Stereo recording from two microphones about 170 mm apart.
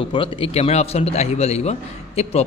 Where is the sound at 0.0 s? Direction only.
30° left (ahead or behind).